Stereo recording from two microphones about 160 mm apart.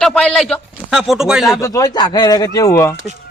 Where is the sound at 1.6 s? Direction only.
20° left (ahead or behind).